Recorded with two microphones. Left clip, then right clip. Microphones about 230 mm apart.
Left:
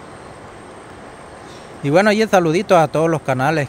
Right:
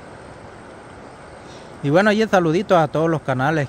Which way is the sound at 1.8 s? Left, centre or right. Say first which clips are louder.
Left 2 dB; centre.